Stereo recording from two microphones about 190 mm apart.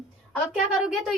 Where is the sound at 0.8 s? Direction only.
5° right (ahead or behind).